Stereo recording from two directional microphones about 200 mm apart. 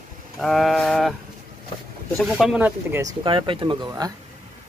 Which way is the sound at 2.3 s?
5° right (ahead or behind).